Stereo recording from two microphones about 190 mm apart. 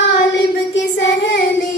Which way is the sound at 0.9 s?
70° left (ahead or behind).